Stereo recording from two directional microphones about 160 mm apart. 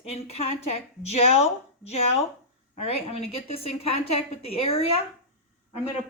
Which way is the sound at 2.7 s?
40° left (ahead or behind).